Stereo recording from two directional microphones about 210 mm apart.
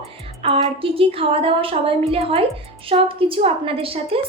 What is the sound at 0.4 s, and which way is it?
A woman's voice, 25° right (ahead or behind).